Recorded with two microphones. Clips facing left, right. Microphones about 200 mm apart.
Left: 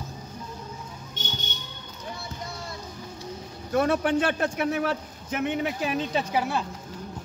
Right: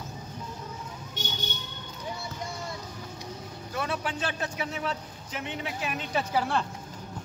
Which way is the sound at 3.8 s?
50° left (ahead or behind).